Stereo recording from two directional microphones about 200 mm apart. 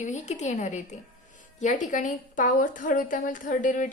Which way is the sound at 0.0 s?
35° left (ahead or behind).